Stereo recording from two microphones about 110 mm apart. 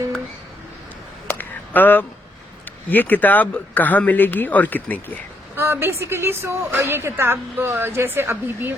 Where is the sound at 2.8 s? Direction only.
15° left (ahead or behind).